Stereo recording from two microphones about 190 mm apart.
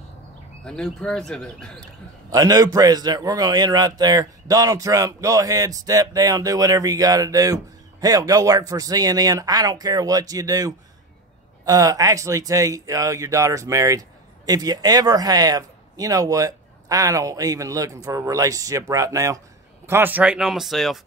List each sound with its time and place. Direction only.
0.7 s speech: 5° left (ahead or behind)
2.3 s speech: 20° right (ahead or behind); by 21.0 s centre (ahead or behind)